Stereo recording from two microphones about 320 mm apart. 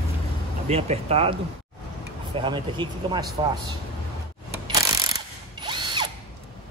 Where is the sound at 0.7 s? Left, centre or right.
Centre.